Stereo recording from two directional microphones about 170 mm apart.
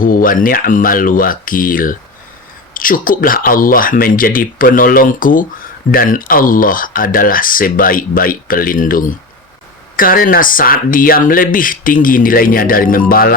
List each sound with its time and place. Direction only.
0.0 s speech: 55° left (ahead or behind)